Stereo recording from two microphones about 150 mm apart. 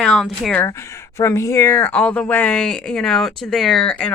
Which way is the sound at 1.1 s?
20° left (ahead or behind).